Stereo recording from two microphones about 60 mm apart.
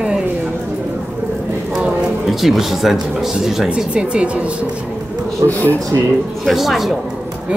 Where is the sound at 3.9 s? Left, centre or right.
Centre.